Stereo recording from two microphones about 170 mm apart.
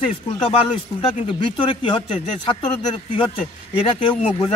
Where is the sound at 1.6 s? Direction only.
30° left (ahead or behind).